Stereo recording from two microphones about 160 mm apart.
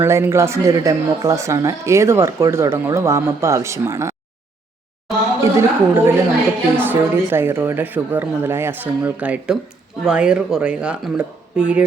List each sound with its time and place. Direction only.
0.0 s speech: 15° right (ahead or behind)
5.4 s a woman's voice: 15° right (ahead or behind)